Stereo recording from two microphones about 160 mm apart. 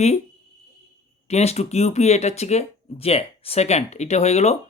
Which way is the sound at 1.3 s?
40° left (ahead or behind).